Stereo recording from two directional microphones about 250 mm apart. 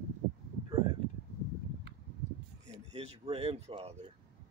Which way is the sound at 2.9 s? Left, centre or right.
Right.